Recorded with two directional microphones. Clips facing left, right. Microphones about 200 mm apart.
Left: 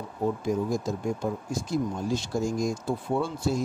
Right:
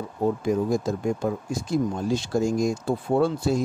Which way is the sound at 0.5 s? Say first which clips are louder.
Right 4 dB; 65° right (ahead or behind).